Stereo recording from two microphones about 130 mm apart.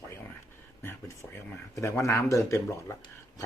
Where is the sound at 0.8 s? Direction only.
20° left (ahead or behind).